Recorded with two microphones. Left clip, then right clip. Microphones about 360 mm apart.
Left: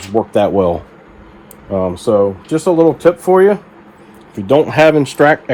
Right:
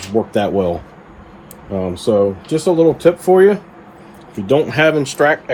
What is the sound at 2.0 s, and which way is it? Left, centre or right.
Speech, centre.